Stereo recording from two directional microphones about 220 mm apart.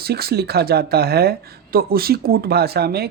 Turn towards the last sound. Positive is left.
turn(degrees=-45)  # may be behind; listen again after turning